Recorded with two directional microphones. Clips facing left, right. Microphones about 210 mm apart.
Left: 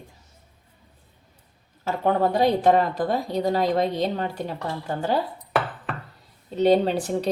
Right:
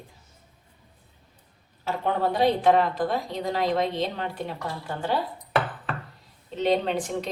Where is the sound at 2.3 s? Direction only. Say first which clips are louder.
Right 1 dB; 40° left (ahead or behind).